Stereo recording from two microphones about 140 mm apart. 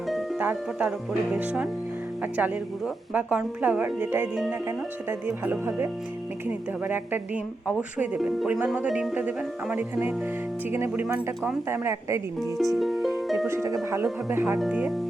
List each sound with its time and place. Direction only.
0.3 s speech: 10° right (ahead or behind)
12.4 s speech: centre (ahead or behind)
13.5 s speech: 20° right (ahead or behind)